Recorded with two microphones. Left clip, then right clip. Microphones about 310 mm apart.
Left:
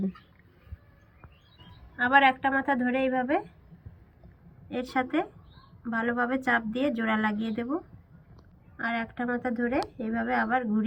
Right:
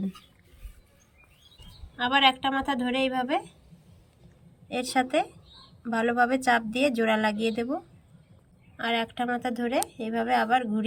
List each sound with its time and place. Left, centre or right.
2.0 s speech: centre
4.7 s speech: centre
8.8 s speech: centre